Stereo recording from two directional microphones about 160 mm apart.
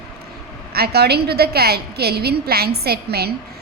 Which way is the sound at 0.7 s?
80° right.